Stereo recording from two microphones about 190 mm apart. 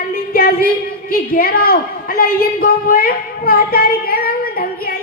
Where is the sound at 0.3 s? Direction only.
50° left (ahead or behind).